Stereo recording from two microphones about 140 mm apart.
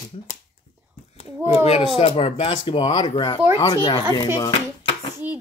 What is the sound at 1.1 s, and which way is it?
A child's voice, 45° left (ahead or behind).